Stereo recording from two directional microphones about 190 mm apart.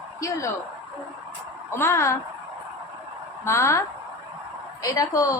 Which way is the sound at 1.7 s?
15° left (ahead or behind).